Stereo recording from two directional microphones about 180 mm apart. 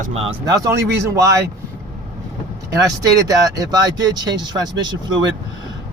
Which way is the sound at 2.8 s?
20° right (ahead or behind).